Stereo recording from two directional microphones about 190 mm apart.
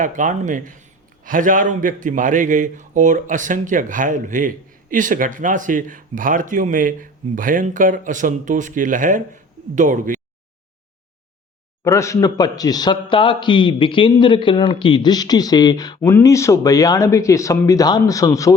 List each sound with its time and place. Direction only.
0.0 s a man's voice: 40° right (ahead or behind)
11.8 s a man's voice: 15° left (ahead or behind)